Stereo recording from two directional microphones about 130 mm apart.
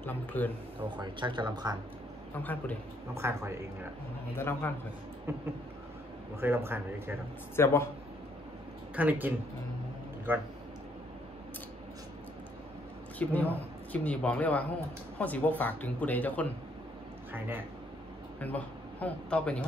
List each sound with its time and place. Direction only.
0.0 s speech: 15° left (ahead or behind)
0.8 s speech: 35° right (ahead or behind)
2.4 s speech: 15° left (ahead or behind)
3.2 s speech: 20° right (ahead or behind)
4.4 s a man's voice: 20° left (ahead or behind)
6.4 s a man's voice: 15° right (ahead or behind)
7.5 s a man's voice: 20° left (ahead or behind)
8.9 s a man's voice: 10° right (ahead or behind)
13.2 s speech: 10° left (ahead or behind)
17.3 s speech: 15° right (ahead or behind)
18.4 s speech: 10° left (ahead or behind)